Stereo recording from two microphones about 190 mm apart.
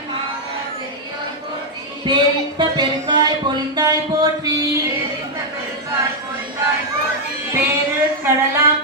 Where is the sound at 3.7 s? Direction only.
20° right (ahead or behind).